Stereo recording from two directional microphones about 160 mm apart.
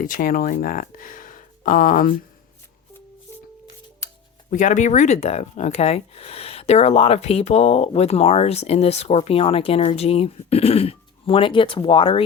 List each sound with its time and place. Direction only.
0.0 s speech: 60° left (ahead or behind)
4.0 s speech: 50° left (ahead or behind)